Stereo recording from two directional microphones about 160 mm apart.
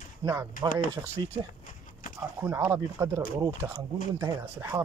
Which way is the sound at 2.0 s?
60° left (ahead or behind).